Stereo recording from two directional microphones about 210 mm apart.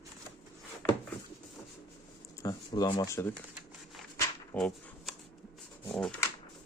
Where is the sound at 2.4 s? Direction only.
15° left (ahead or behind).